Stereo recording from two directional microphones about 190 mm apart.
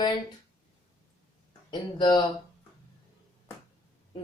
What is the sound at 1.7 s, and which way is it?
Speech, 25° left (ahead or behind).